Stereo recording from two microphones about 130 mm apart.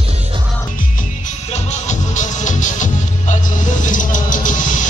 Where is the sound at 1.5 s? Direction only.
65° left (ahead or behind); by 4.5 s 90° left.